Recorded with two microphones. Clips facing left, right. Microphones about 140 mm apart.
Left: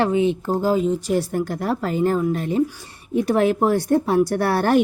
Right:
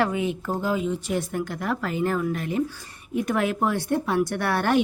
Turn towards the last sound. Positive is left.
turn(degrees=35)  # may be behind; listen again after turning